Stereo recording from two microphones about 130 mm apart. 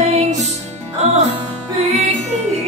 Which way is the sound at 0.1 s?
60° right (ahead or behind).